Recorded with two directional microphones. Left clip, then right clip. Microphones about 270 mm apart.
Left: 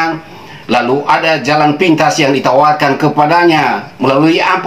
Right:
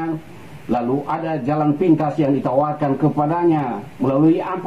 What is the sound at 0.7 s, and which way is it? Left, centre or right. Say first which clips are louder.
A man's voice: left 10 dB; centre.